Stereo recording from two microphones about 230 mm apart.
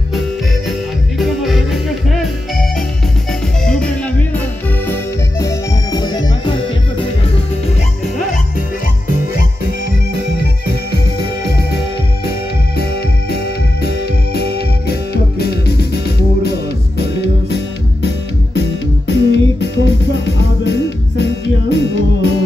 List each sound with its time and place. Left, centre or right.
0.7 s music: centre
3.6 s music: centre
12.3 s music: left
19.0 s music: left